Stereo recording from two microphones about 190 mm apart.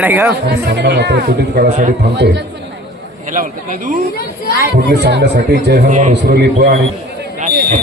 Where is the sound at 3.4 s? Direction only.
45° right (ahead or behind).